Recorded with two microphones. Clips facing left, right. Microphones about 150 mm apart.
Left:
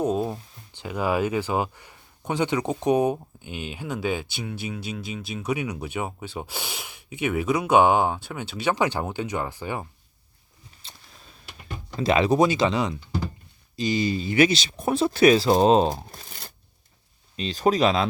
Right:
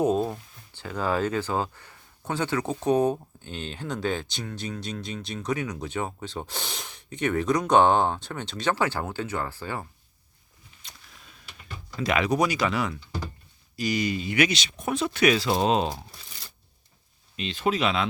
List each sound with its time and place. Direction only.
0.0 s a sound: 5° right (ahead or behind)
0.8 s speech: 15° left (ahead or behind)
10.8 s a sound: 30° left (ahead or behind)
11.9 s speech: 30° left (ahead or behind)
16.1 s shuffling cards: 50° left (ahead or behind)
17.3 s speech: 40° left (ahead or behind)